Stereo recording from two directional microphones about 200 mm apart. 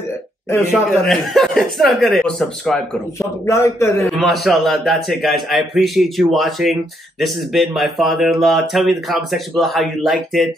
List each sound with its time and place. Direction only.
1.0 s a man's voice: centre (ahead or behind)
3.2 s a man's voice: 15° left (ahead or behind)
4.1 s a man's voice: centre (ahead or behind)